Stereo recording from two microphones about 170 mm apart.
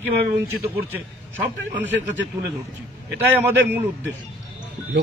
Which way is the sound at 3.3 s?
15° right (ahead or behind).